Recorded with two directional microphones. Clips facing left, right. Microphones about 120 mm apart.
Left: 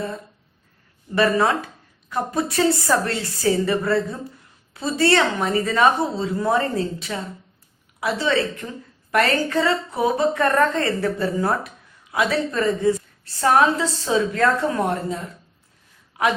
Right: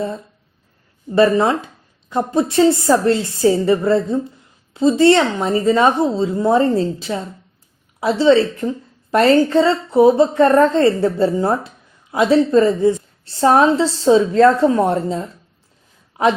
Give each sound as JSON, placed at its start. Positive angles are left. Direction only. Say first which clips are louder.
{"t": 1.1, "sound": "a woman's voice", "louder": "right 5 dB", "side_deg": -25}